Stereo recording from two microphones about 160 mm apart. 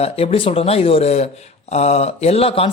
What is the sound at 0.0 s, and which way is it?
Speech, 40° left (ahead or behind).